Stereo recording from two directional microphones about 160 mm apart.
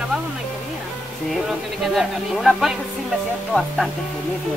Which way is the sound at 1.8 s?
Centre (ahead or behind).